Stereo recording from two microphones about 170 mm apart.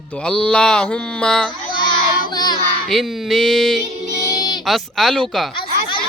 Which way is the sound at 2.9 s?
Centre (ahead or behind).